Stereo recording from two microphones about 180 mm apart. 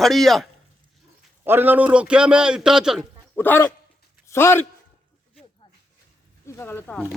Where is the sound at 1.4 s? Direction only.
10° right (ahead or behind).